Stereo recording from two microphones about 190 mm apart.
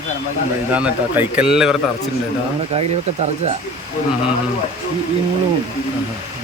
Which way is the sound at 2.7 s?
30° right (ahead or behind).